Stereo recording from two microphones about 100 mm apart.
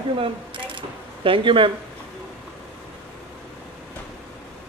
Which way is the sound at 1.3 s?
60° right (ahead or behind).